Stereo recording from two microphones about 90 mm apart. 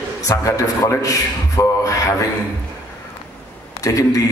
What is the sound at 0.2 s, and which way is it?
A man's voice, 40° left (ahead or behind).